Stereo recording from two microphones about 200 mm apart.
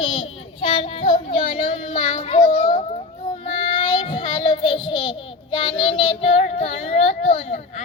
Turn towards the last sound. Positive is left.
turn(degrees=30)  # may be behind; listen again after turning